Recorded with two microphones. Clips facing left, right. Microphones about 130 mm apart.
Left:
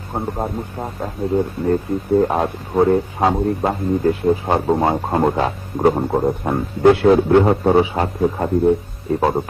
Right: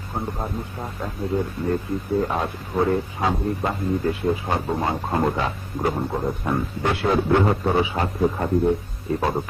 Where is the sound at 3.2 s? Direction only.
55° left (ahead or behind).